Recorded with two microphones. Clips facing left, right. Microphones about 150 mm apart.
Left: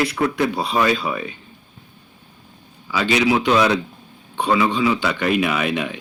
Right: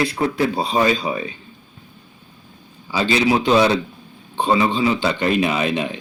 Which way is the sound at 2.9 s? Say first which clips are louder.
Even; 30° right (ahead or behind).